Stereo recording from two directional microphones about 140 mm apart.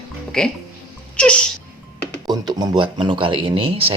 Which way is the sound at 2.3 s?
30° right (ahead or behind).